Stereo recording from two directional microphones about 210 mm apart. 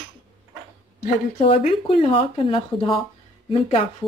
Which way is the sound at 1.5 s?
30° left (ahead or behind).